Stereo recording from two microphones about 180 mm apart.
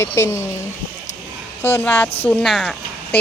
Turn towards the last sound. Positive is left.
turn(degrees=5)  # may be behind; listen again after turning